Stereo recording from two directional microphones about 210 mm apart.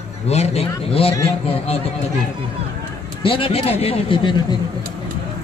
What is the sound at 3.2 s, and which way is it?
A man's voice, 25° left (ahead or behind).